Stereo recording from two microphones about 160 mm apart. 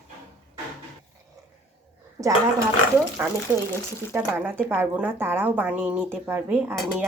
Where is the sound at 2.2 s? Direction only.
15° right (ahead or behind).